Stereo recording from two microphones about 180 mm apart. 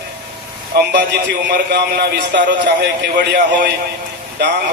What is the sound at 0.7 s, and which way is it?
A man's voice, 70° right (ahead or behind).